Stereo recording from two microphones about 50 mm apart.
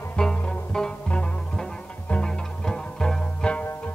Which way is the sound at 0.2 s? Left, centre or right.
Centre.